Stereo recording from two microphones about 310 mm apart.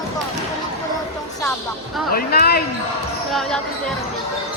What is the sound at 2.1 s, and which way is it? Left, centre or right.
Speech, left.